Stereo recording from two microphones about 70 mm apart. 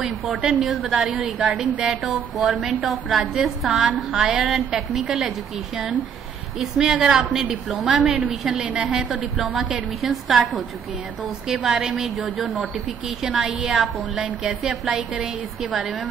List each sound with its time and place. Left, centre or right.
0.3 s a woman's voice: centre
0.6 s a woman's voice: centre
6.6 s a woman's voice: centre
13.2 s a woman's voice: centre